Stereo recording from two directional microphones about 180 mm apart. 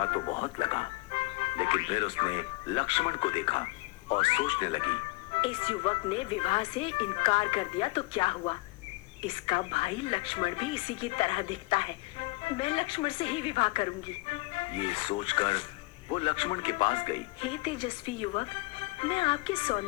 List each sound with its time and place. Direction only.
0.0 s a woman's voice: 30° left (ahead or behind)